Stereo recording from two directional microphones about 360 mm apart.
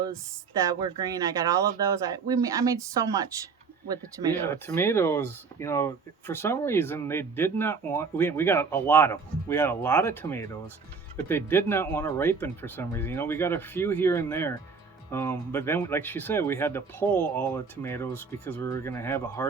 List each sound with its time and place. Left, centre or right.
0.6 s speech: centre
4.4 s speech: centre